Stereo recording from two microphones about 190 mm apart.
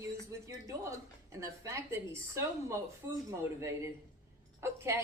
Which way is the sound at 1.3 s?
15° right (ahead or behind).